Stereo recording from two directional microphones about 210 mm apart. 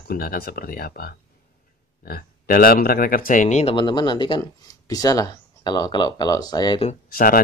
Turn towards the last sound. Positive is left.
turn(degrees=45)  # may be behind; listen again after turning